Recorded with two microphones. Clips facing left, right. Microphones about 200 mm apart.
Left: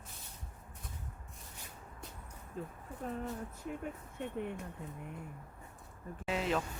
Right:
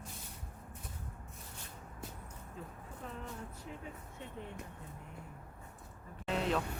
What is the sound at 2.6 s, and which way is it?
Speech, 45° left (ahead or behind).